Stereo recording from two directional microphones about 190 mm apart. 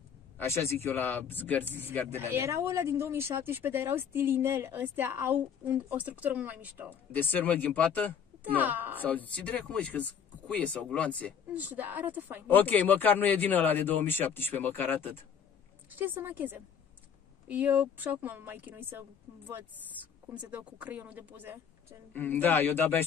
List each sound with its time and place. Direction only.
0.4 s speech: 15° left (ahead or behind)
2.1 s speech: 15° right (ahead or behind)
7.1 s speech: 10° left (ahead or behind)
8.5 s speech: 10° right (ahead or behind)
9.0 s speech: 10° left (ahead or behind)
11.5 s speech: 10° right (ahead or behind)
12.4 s speech: 10° left (ahead or behind)
15.9 s speech: 10° right (ahead or behind)
20.2 s speech: 10° right (ahead or behind)
22.1 s speech: 10° left (ahead or behind)